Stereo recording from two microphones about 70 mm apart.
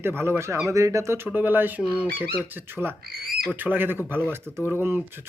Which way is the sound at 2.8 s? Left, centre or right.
Right.